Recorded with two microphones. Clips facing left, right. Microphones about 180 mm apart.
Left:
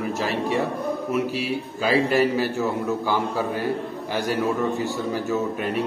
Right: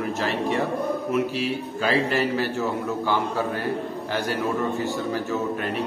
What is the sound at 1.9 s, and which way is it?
A man's voice, 10° left (ahead or behind).